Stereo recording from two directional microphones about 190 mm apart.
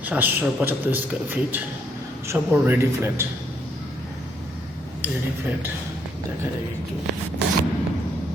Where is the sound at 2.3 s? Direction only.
10° right (ahead or behind).